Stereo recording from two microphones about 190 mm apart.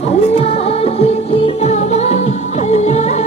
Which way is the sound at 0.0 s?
35° left (ahead or behind).